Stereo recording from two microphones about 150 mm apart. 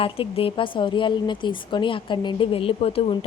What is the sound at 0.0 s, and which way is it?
A woman's voice, 40° left (ahead or behind).